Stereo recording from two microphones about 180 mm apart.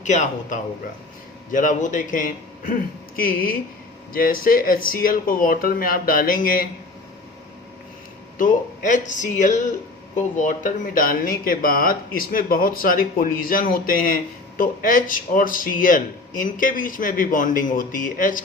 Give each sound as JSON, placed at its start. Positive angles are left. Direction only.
{"t": 0.0, "sound": "speech", "side_deg": 40}
{"t": 4.1, "sound": "speech", "side_deg": 50}
{"t": 8.4, "sound": "speech", "side_deg": 45}